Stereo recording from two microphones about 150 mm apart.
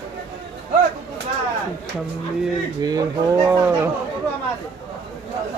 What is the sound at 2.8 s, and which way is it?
Speech, 25° right (ahead or behind).